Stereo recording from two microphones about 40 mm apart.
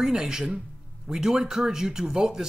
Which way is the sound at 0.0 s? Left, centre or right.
Centre.